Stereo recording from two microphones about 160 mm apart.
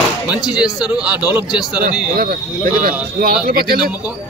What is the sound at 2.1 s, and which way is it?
Speech, 70° right (ahead or behind).